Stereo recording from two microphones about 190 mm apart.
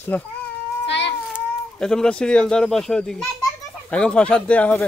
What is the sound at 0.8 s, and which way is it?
Cat, 65° left (ahead or behind).